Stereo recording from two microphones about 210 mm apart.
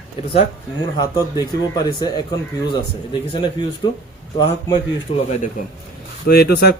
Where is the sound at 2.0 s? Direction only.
20° left (ahead or behind).